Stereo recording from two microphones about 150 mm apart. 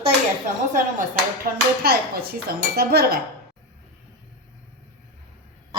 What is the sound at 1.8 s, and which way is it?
Dishes, 90° right.